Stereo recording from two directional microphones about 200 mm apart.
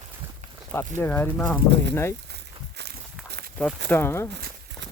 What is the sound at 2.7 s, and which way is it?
Walk, 55° right (ahead or behind).